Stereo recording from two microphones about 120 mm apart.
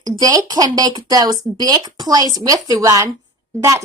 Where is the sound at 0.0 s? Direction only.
30° right (ahead or behind).